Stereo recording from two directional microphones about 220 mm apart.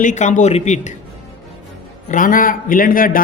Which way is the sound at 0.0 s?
35° left (ahead or behind).